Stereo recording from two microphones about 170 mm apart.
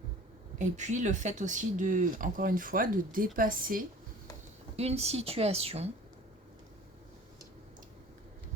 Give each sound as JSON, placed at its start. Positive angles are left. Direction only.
{"t": 0.6, "sound": "speech", "side_deg": -45}
{"t": 4.8, "sound": "a woman's voice", "side_deg": -40}